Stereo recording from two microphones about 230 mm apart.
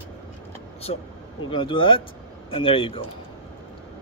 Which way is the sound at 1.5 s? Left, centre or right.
Left.